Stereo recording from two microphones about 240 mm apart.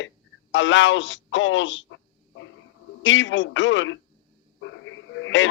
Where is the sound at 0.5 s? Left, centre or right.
Left.